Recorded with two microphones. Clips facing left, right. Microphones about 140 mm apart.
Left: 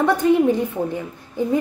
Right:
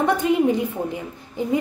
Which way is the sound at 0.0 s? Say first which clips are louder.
Left 3 dB; 20° right (ahead or behind).